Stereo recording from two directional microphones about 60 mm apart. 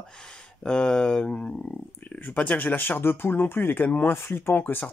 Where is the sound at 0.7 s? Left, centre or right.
Centre.